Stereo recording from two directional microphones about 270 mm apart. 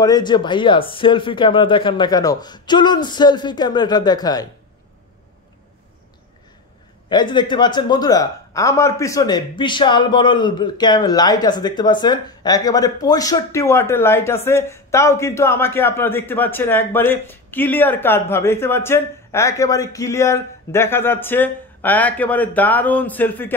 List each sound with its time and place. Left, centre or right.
0.0 s speech: centre
7.1 s speech: centre